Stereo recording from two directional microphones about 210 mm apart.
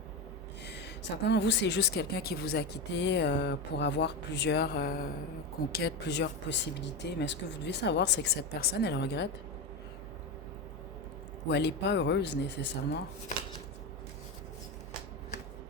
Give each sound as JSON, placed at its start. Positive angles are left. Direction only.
{"t": 0.6, "sound": "a woman's voice", "side_deg": 55}
{"t": 11.4, "sound": "a woman's voice", "side_deg": 55}